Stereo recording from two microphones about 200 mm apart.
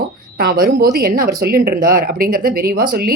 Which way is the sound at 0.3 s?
50° right (ahead or behind).